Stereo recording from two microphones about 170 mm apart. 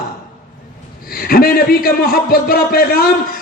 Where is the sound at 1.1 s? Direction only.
60° left (ahead or behind).